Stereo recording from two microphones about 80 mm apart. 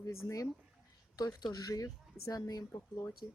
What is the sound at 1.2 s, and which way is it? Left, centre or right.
Speech, left.